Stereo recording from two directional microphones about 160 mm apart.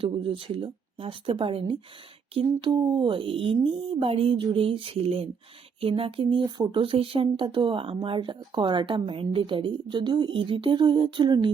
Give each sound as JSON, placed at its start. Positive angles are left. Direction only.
{"t": 0.0, "sound": "speech", "side_deg": -35}